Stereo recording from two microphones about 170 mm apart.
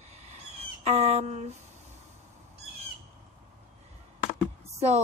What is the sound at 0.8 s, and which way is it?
Speech, 40° right (ahead or behind).